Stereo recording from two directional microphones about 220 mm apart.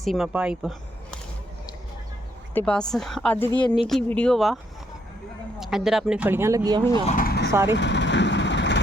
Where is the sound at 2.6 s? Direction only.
5° left (ahead or behind).